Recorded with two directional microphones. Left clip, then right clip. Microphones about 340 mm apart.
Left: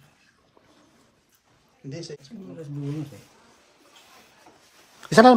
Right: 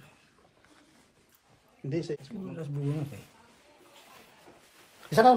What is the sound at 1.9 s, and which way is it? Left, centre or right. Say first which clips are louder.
Speech: right 4 dB; right.